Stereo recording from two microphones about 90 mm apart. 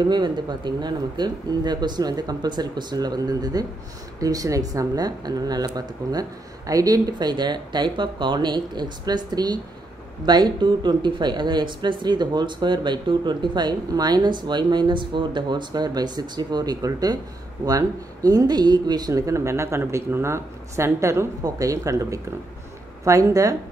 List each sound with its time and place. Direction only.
0.1 s speech: 55° right (ahead or behind); by 23.5 s 40° right (ahead or behind)